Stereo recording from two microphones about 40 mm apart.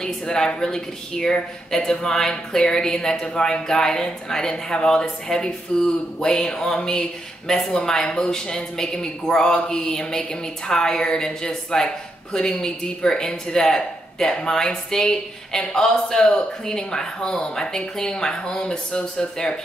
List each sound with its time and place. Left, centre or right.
0.0 s speech: left
6.1 s speech: centre
18.9 s speech: left
19.3 s speech: centre